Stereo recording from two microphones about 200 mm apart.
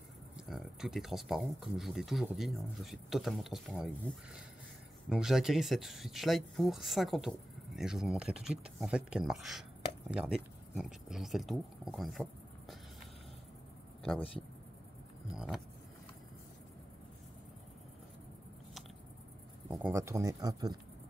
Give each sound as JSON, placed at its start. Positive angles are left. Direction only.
{"t": 0.5, "sound": "speech", "side_deg": 0}
{"t": 14.0, "sound": "speech", "side_deg": 5}
{"t": 19.7, "sound": "speech", "side_deg": -10}